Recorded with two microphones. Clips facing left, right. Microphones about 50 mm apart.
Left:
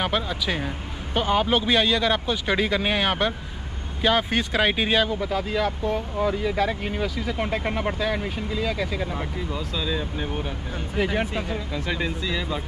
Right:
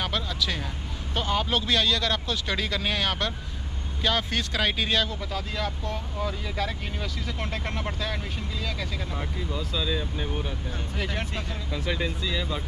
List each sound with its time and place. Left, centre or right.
0.0 s speech: centre